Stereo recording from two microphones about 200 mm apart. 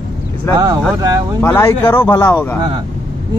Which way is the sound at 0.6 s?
20° right (ahead or behind).